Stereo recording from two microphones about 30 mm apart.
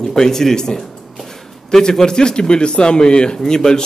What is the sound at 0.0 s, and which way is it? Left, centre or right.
A man's voice, centre.